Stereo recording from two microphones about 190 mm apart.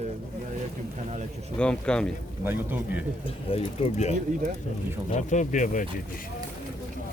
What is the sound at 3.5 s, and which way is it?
Speech, 30° left (ahead or behind).